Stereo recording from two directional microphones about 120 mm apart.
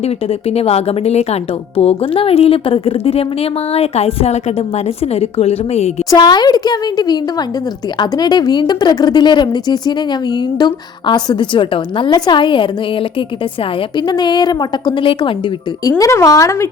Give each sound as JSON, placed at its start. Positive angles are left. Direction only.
{"t": 0.0, "sound": "a woman's voice", "side_deg": 55}
{"t": 6.1, "sound": "speech", "side_deg": 35}
{"t": 15.8, "sound": "speech", "side_deg": 30}